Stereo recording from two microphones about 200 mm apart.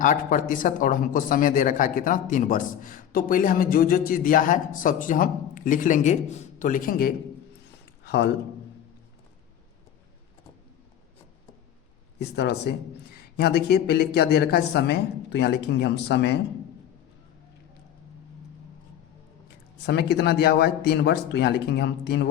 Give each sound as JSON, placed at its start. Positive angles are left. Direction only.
{"t": 0.0, "sound": "speech", "side_deg": 40}
{"t": 8.0, "sound": "a sound", "side_deg": 55}
{"t": 12.2, "sound": "speech", "side_deg": 55}
{"t": 19.8, "sound": "speech", "side_deg": 55}